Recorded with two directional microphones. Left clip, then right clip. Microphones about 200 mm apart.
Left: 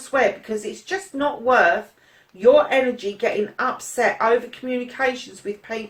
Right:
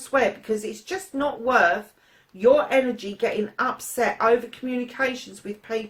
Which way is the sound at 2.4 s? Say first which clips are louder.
Left 3 dB; 50° right (ahead or behind).